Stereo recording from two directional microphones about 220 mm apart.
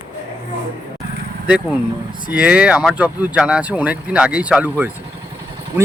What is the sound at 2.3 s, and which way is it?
A man's voice, 5° right (ahead or behind).